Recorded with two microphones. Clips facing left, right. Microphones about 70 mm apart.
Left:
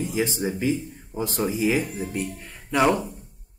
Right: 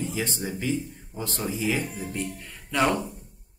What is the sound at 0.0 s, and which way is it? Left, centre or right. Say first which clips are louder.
Speech: left 5 dB; centre.